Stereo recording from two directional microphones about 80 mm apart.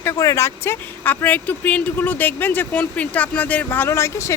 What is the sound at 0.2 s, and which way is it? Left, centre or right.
Speech, left.